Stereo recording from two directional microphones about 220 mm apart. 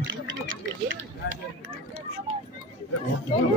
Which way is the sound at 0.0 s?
60° right (ahead or behind).